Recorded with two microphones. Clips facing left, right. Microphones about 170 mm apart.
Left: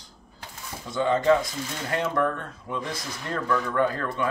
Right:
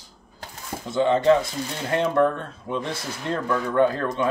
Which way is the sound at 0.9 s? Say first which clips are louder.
Right 3 dB; 25° right (ahead or behind).